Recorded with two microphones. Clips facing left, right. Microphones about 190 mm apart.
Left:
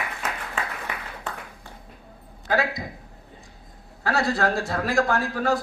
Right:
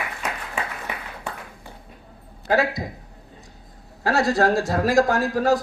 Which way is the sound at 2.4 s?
35° right (ahead or behind).